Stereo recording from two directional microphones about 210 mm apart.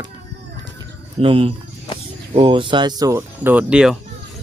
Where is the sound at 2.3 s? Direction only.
25° right (ahead or behind); by 3.9 s 5° right (ahead or behind).